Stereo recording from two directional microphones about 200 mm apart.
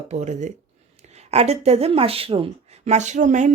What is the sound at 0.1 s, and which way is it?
Speech, 35° right (ahead or behind).